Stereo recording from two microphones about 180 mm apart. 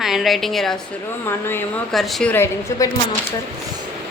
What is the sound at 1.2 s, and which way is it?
Speech, 10° left (ahead or behind).